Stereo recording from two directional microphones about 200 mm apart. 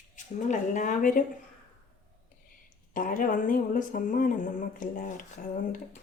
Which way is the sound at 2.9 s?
45° left (ahead or behind).